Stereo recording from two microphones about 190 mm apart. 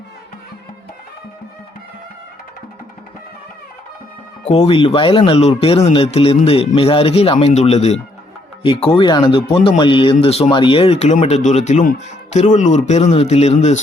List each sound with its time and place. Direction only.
4.4 s speech: 30° left (ahead or behind)